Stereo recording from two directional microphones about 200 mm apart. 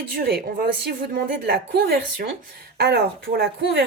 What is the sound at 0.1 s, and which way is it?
Speech, 50° right (ahead or behind).